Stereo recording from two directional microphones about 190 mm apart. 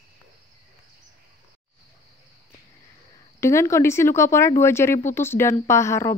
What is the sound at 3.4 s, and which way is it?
Speech, 15° left (ahead or behind).